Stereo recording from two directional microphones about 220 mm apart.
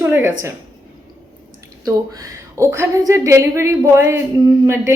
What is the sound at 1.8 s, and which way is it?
A woman's voice, 15° right (ahead or behind).